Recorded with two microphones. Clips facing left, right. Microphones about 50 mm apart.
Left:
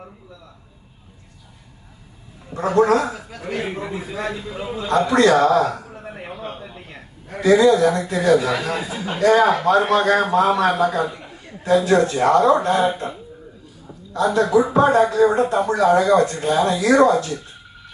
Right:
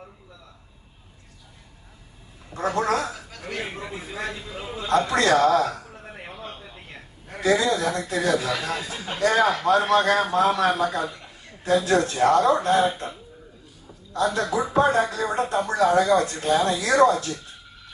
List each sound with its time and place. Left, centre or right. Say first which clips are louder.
2.6 s speech: left 7 dB; left
3.3 s a man's voice: left 7 dB; centre
4.9 s a man's voice: left 4 dB; left
6.2 s a sound: left 7 dB; centre
7.4 s speech: left 8 dB; left
11.3 s a sound: left 3 dB; left
11.8 s speech: left 3 dB; left
14.3 s speech: left 8 dB; left
15.1 s speech: left 8 dB; left